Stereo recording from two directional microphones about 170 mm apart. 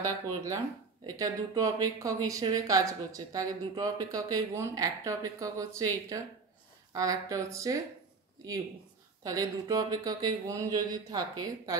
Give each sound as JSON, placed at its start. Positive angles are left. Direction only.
{"t": 1.0, "sound": "speech", "side_deg": -20}